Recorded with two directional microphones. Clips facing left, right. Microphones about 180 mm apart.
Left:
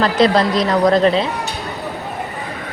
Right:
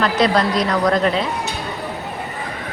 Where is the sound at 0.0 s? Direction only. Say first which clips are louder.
Left 3 dB; 30° left (ahead or behind).